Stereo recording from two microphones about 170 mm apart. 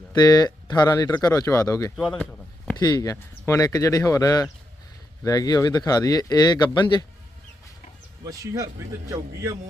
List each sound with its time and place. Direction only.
0.1 s speech: 25° left (ahead or behind)
2.0 s speech: 5° left (ahead or behind)
2.7 s speech: 20° left (ahead or behind)
8.2 s speech: 20° right (ahead or behind)